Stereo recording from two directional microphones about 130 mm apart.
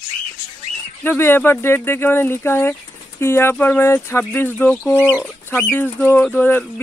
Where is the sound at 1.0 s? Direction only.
15° left (ahead or behind).